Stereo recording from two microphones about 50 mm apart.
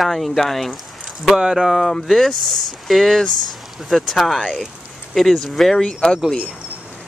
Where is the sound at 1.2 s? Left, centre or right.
Centre.